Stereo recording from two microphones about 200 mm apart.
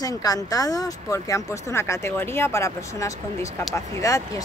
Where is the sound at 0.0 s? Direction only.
20° left (ahead or behind).